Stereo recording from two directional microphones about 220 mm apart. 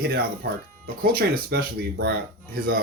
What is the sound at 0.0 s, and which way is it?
Speech, 45° right (ahead or behind).